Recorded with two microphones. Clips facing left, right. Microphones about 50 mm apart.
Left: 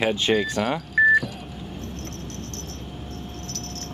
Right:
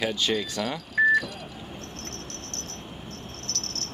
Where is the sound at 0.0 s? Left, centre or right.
Left.